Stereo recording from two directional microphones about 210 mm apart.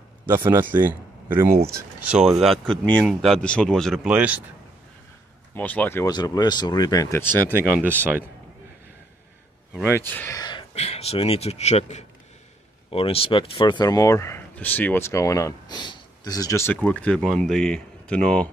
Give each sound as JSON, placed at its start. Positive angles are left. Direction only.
{"t": 0.4, "sound": "speech", "side_deg": -10}
{"t": 5.5, "sound": "speech", "side_deg": 5}
{"t": 8.0, "sound": "a man's voice", "side_deg": -10}
{"t": 9.8, "sound": "speech", "side_deg": 10}